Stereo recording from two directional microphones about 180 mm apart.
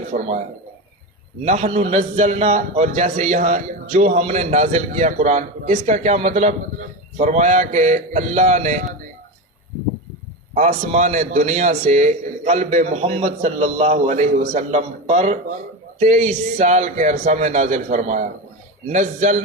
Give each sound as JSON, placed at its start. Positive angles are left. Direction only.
{"t": 0.1, "sound": "a man's voice", "side_deg": -40}
{"t": 1.5, "sound": "a man's voice", "side_deg": -35}
{"t": 10.5, "sound": "a man's voice", "side_deg": -40}